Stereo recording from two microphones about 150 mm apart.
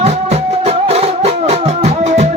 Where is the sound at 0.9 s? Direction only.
45° right (ahead or behind).